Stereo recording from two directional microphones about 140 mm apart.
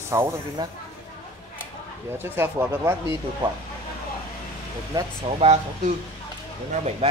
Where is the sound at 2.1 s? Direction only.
15° right (ahead or behind).